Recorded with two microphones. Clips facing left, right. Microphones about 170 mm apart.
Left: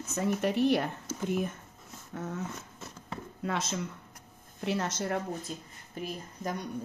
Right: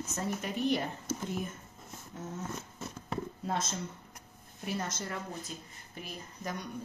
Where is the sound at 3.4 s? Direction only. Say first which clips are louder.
Left 6 dB; 70° left (ahead or behind).